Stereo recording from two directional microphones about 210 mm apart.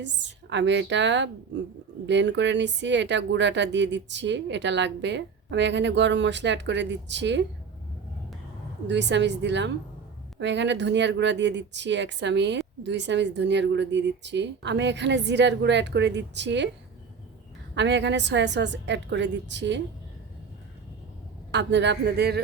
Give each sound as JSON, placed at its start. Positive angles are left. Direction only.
{"t": 0.5, "sound": "speech", "side_deg": -60}
{"t": 8.9, "sound": "speech", "side_deg": -55}
{"t": 17.7, "sound": "speech", "side_deg": -55}
{"t": 21.5, "sound": "speech", "side_deg": -55}